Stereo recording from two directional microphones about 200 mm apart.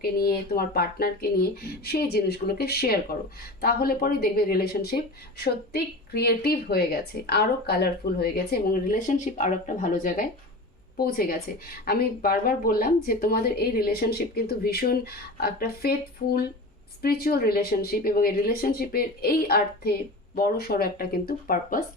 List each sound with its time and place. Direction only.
0.0 s speech: 50° left (ahead or behind)